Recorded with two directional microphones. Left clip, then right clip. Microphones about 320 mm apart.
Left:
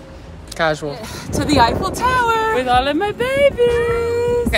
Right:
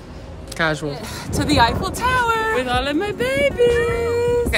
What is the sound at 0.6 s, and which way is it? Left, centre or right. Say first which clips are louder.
Speech: left 2 dB; centre.